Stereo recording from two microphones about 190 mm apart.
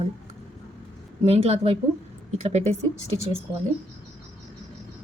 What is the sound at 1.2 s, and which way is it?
A woman's voice, 30° right (ahead or behind).